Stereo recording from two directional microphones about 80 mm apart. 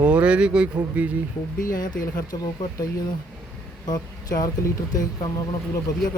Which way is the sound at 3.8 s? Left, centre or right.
Left.